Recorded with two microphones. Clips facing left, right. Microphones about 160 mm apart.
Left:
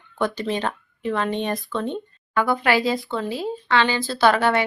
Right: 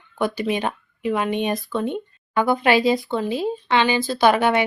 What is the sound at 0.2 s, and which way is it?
Speech, 10° right (ahead or behind).